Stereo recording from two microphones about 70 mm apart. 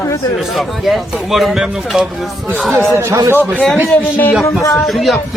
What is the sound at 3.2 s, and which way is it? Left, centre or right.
Speech, right.